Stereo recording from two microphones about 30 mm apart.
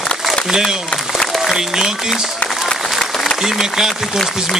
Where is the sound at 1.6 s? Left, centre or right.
Centre.